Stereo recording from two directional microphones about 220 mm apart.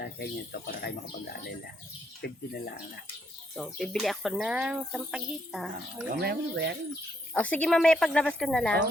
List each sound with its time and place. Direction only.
0.0 s speech: 45° left (ahead or behind)
3.5 s speech: centre (ahead or behind)
6.2 s speech: 50° right (ahead or behind)
7.3 s speech: 5° left (ahead or behind)